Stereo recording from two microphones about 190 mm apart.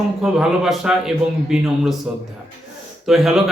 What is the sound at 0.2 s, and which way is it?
A man's voice, 5° right (ahead or behind).